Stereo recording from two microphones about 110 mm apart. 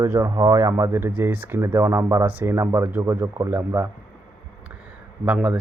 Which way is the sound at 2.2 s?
15° right (ahead or behind).